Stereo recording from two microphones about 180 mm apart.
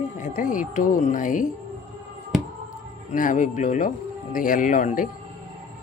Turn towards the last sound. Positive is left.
turn(degrees=45)  # may be behind; listen again after turning